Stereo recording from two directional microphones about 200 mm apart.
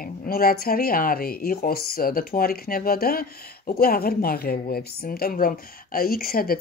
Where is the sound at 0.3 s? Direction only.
50° left (ahead or behind).